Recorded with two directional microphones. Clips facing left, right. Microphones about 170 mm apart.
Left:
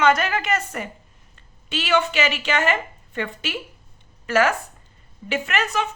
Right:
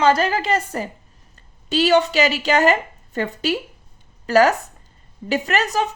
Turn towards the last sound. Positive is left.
turn(degrees=-40)  # may be behind; listen again after turning